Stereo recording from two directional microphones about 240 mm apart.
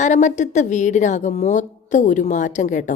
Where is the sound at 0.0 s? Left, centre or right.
Left.